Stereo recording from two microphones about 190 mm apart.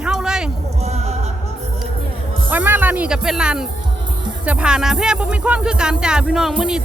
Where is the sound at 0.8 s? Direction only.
35° right (ahead or behind).